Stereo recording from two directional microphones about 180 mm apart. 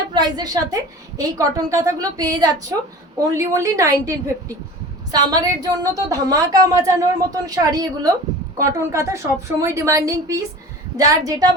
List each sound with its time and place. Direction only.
0.1 s a woman's voice: 20° right (ahead or behind)